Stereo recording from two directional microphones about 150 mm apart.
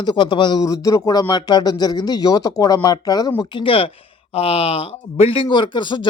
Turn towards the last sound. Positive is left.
turn(degrees=30)  # may be behind; listen again after turning